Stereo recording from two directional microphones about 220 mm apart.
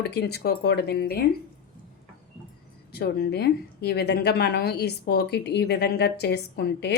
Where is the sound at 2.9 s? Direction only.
45° left (ahead or behind).